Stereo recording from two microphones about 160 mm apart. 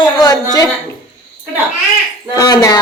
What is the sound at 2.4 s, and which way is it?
Speech, 25° left (ahead or behind).